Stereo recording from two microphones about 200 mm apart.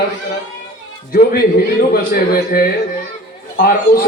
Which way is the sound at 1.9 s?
50° left (ahead or behind).